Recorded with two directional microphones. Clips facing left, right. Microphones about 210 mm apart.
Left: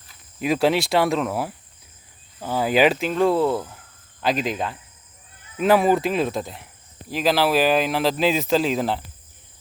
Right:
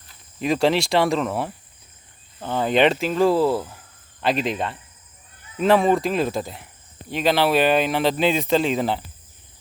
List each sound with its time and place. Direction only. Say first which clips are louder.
0.3 s speech: even; 5° left (ahead or behind)